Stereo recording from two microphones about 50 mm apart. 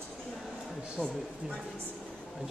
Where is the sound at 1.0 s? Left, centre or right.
Left.